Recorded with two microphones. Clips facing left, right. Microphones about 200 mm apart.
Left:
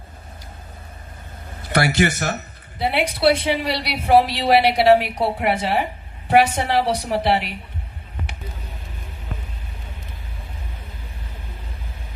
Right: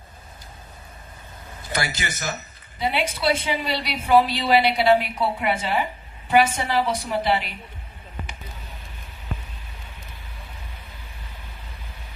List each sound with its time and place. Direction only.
1.7 s a woman's voice: 65° left (ahead or behind)